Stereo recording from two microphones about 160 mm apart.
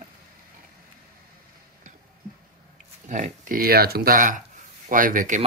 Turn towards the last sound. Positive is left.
turn(degrees=-55)  # may be behind; listen again after turning